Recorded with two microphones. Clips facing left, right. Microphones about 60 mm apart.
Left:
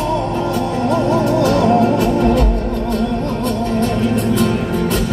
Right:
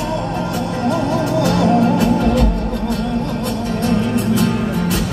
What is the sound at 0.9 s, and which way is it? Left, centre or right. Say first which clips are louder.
Music: left 3 dB; left.